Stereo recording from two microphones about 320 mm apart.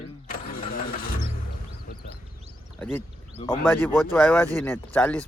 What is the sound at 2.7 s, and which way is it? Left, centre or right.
Speech, centre.